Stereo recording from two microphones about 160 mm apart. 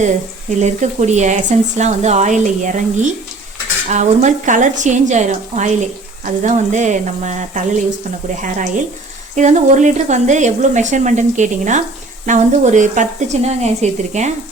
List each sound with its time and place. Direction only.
0.6 s speech: 45° right (ahead or behind)